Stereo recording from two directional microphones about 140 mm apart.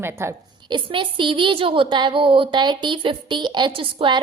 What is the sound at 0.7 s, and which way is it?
A woman's voice, 35° right (ahead or behind).